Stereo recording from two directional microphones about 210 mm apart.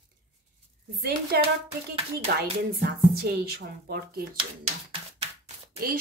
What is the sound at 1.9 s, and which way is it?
Speech, 45° right (ahead or behind).